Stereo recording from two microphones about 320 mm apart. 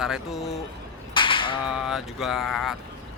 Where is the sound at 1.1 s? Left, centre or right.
Centre.